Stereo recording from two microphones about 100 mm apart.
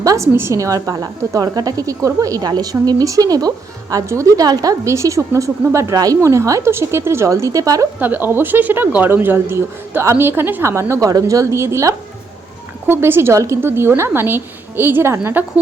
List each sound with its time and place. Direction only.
0.0 s a woman's voice: 35° right (ahead or behind)
7.9 s speech: 15° right (ahead or behind)